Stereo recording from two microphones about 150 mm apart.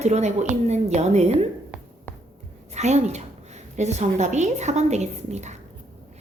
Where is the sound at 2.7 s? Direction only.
50° right (ahead or behind).